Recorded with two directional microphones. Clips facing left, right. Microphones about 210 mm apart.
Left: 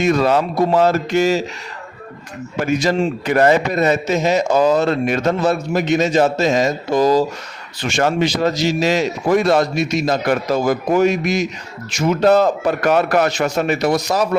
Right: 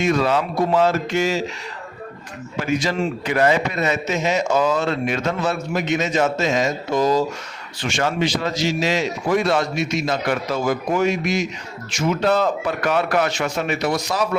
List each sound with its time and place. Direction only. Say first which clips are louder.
0.0 s a man's voice: left 4 dB; 40° left (ahead or behind)
2.6 s a man's voice: left 4 dB; 40° left (ahead or behind)